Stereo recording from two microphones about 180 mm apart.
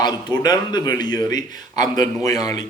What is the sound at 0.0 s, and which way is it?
A man's voice, 25° left (ahead or behind).